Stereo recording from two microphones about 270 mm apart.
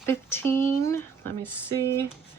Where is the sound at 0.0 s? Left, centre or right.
Centre.